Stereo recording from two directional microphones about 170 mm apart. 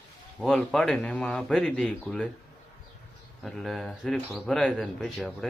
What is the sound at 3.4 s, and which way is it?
Speech, centre (ahead or behind).